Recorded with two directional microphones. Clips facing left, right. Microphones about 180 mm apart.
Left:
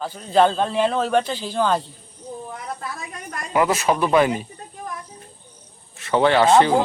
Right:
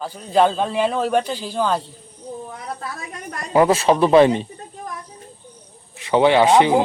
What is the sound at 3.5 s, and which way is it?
Speech, 30° right (ahead or behind).